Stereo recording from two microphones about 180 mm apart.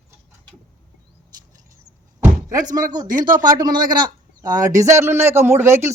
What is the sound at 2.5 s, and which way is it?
Speech, 20° right (ahead or behind).